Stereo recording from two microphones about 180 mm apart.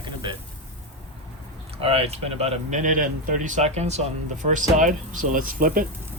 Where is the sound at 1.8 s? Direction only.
35° right (ahead or behind); by 5.8 s 50° right (ahead or behind).